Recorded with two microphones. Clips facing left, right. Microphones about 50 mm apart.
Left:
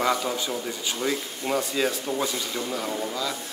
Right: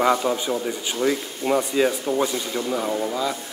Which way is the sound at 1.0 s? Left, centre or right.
Centre.